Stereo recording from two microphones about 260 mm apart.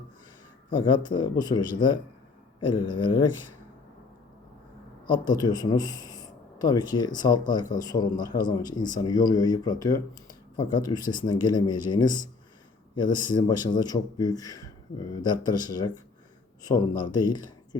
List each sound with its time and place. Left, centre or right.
0.9 s a man's voice: centre
5.4 s a man's voice: centre